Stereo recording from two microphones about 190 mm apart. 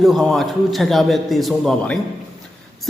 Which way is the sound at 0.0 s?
Centre (ahead or behind).